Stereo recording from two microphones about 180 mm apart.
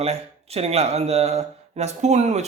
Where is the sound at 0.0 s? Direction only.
35° right (ahead or behind).